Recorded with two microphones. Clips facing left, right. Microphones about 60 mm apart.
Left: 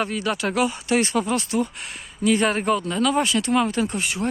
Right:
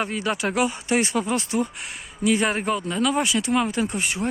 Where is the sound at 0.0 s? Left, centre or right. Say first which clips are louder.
Left 1 dB; right.